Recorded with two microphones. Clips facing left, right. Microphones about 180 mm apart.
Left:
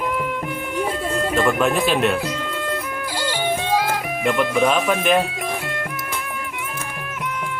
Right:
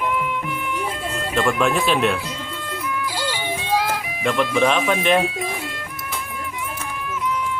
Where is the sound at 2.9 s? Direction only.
50° left (ahead or behind).